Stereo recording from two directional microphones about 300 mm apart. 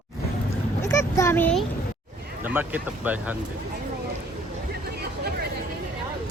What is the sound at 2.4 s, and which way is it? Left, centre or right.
Speech, centre.